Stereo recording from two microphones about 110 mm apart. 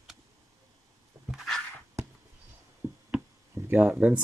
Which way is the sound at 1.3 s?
Centre (ahead or behind).